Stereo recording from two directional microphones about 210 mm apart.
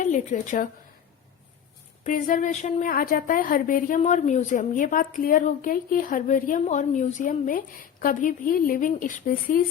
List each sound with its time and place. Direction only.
0.0 s a woman's voice: 35° left (ahead or behind)
2.0 s a woman's voice: 40° left (ahead or behind)